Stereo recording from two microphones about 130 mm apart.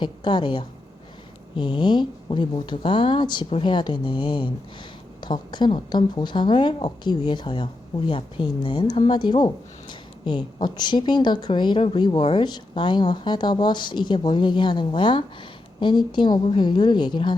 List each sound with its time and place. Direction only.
0.0 s a woman's voice: 35° left (ahead or behind)